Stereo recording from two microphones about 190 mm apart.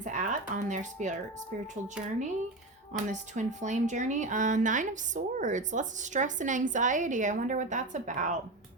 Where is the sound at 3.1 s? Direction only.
40° right (ahead or behind).